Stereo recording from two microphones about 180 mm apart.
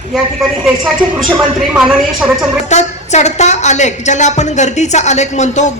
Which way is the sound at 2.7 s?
40° left (ahead or behind).